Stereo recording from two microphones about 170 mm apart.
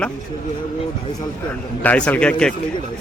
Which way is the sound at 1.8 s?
10° left (ahead or behind).